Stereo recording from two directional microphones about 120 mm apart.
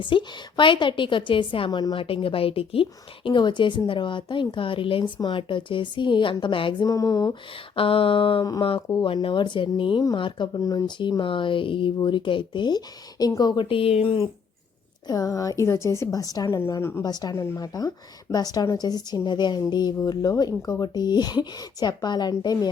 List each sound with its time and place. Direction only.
0.0 s a woman's voice: 40° left (ahead or behind)
3.2 s a woman's voice: 40° left (ahead or behind)
6.8 s a woman's voice: 30° left (ahead or behind)
7.8 s a woman's voice: 50° left (ahead or behind)
13.7 s a woman's voice: 50° left (ahead or behind)
15.0 s a woman's voice: 30° left (ahead or behind)
17.0 s speech: 35° left (ahead or behind)